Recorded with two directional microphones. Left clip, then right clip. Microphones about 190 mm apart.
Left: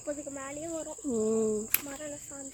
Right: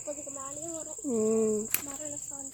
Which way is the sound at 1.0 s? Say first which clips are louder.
Right 2 dB; centre (ahead or behind).